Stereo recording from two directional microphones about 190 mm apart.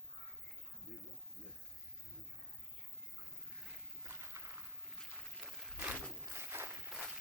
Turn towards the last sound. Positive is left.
turn(degrees=-15)  # may be behind; listen again after turning